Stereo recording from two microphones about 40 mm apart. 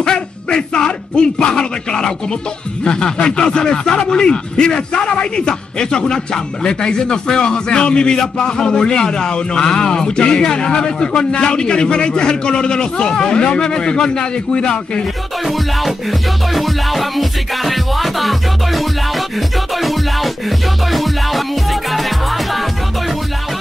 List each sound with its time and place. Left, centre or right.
0.0 s a man's voice: left
15.4 s music: centre